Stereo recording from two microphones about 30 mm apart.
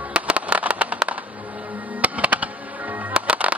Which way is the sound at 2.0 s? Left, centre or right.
Right.